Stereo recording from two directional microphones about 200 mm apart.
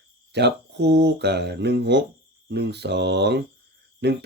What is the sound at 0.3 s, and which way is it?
Speech, 60° right (ahead or behind).